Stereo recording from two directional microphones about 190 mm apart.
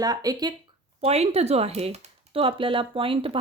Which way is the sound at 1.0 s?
30° right (ahead or behind).